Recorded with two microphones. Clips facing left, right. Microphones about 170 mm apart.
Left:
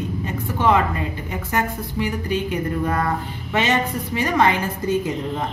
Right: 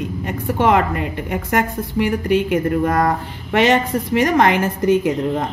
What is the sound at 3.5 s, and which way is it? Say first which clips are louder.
A woman's voice: right 6 dB; 60° right (ahead or behind).